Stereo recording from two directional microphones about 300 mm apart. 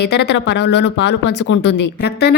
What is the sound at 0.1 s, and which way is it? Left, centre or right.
Speech, left.